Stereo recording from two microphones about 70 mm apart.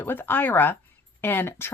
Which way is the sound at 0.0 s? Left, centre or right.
Left.